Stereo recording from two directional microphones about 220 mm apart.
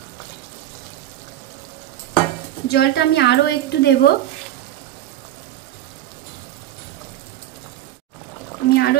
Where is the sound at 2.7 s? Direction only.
45° left (ahead or behind).